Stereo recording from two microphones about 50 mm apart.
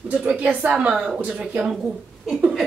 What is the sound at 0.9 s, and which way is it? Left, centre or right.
Speech, centre.